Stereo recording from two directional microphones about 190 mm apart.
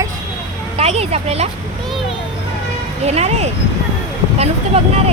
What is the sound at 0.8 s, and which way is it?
Speech, 35° right (ahead or behind).